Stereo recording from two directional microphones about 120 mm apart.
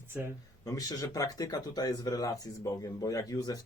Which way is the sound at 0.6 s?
30° left (ahead or behind).